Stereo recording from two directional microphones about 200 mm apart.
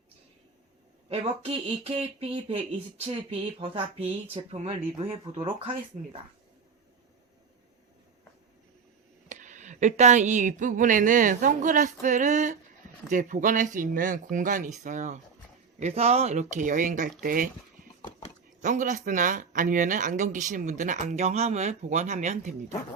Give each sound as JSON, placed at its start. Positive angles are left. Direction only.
{"t": 1.1, "sound": "speech", "side_deg": -30}
{"t": 9.3, "sound": "speech", "side_deg": -40}
{"t": 18.6, "sound": "speech", "side_deg": -40}